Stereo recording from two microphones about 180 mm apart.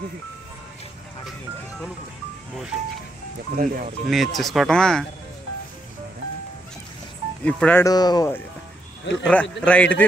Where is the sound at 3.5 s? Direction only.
50° right (ahead or behind).